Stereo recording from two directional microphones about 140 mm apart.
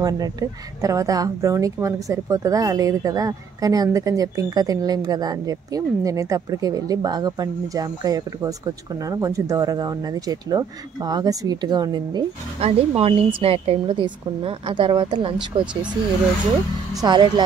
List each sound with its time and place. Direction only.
0.0 s speech: 25° right (ahead or behind)
12.5 s a woman's voice: 45° right (ahead or behind); by 15.7 s 25° right (ahead or behind)
17.0 s a woman's voice: 30° right (ahead or behind)